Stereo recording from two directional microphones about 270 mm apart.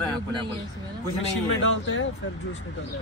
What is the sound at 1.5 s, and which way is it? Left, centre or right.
Speech, left.